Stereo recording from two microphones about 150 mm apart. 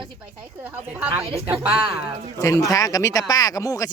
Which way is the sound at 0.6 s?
10° right (ahead or behind).